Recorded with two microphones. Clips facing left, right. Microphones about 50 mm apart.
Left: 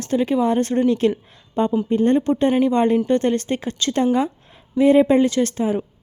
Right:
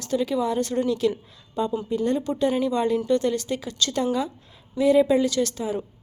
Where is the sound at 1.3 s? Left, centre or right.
Left.